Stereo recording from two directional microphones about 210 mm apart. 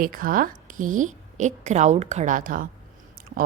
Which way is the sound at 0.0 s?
40° right (ahead or behind).